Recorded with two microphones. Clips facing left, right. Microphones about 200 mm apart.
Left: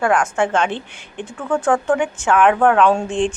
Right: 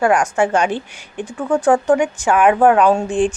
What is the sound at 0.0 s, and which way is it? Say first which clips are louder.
A woman's voice: right 2 dB; 10° right (ahead or behind).